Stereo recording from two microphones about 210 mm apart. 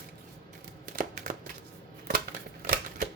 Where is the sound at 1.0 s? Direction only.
40° right (ahead or behind).